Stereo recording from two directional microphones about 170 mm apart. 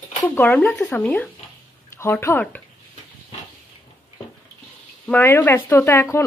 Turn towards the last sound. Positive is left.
turn(degrees=15)  # may be behind; listen again after turning